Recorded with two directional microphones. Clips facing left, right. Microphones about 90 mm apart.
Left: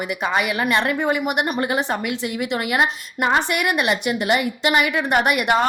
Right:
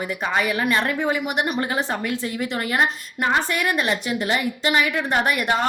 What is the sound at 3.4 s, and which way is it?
A woman's voice, 70° left (ahead or behind).